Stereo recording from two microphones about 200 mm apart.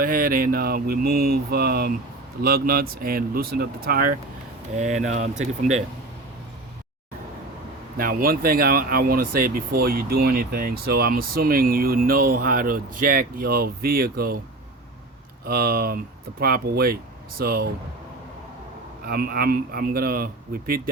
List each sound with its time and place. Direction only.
0.0 s speech: 45° right (ahead or behind)
4.8 s speech: 35° right (ahead or behind)
7.9 s speech: 45° right (ahead or behind)
15.4 s speech: 50° right (ahead or behind)
19.0 s speech: 50° right (ahead or behind)